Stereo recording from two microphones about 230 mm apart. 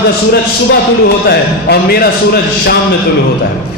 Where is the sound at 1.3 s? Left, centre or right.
Left.